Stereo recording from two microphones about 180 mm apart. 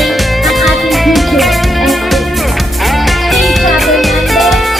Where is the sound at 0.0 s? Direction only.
Centre (ahead or behind).